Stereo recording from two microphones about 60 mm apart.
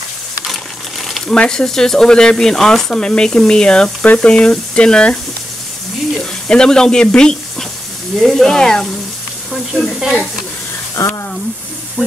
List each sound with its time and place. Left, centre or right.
1.0 s speech: centre
6.4 s speech: centre
9.5 s sizzle: centre
11.0 s speech: left